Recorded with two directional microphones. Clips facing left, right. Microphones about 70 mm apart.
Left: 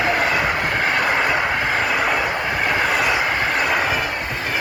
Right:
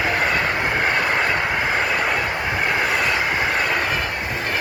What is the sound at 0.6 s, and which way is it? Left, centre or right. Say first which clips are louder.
Train: even; centre.